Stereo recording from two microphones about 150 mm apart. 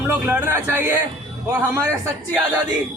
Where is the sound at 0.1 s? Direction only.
15° right (ahead or behind).